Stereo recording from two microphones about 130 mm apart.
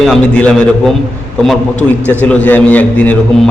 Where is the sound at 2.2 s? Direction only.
10° left (ahead or behind).